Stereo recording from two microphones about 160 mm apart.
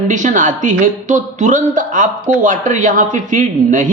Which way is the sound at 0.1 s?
50° right (ahead or behind).